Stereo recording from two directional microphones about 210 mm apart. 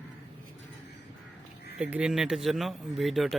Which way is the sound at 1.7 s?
5° right (ahead or behind).